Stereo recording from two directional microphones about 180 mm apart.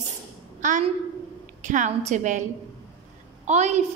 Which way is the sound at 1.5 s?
45° right (ahead or behind).